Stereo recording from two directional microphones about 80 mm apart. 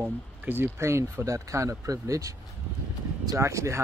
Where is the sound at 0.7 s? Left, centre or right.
Right.